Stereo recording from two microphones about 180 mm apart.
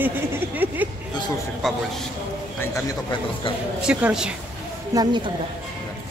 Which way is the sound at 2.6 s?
15° left (ahead or behind).